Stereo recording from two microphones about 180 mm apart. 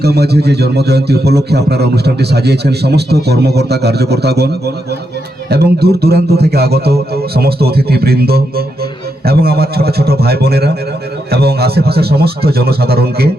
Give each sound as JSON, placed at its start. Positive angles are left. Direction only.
{"t": 0.0, "sound": "a man's voice", "side_deg": -65}